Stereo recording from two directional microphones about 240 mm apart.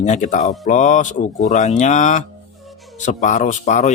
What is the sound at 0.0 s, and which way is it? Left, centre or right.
A man's voice, left.